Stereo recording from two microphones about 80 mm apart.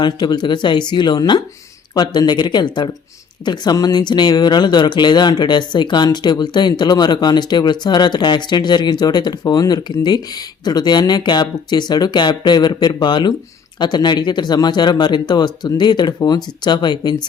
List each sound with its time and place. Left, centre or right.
0.0 s speech: left